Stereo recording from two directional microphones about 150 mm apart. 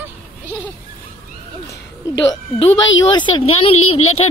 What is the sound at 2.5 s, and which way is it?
Speech, 30° left (ahead or behind).